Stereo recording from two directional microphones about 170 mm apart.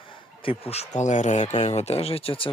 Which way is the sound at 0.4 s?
35° left (ahead or behind).